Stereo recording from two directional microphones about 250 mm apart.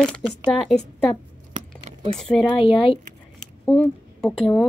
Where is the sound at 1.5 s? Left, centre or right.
Right.